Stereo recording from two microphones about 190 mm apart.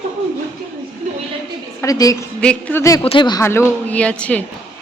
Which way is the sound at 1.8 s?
20° left (ahead or behind).